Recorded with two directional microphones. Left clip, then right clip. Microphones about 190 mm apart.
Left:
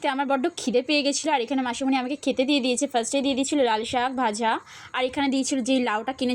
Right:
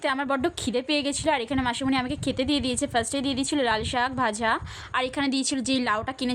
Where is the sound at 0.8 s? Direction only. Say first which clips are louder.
Left 3 dB; 35° right (ahead or behind).